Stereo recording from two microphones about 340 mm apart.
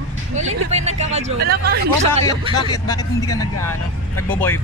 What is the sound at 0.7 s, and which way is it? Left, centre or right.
A man's voice, centre.